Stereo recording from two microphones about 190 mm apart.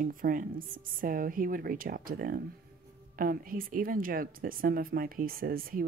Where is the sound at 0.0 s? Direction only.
45° right (ahead or behind).